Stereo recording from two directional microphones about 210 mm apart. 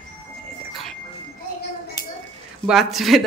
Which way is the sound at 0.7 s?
Centre (ahead or behind).